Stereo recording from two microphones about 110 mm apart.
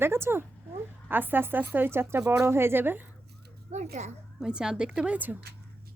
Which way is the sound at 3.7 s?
90° right.